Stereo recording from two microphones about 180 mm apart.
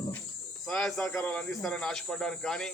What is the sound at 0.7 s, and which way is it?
Speech, 5° left (ahead or behind).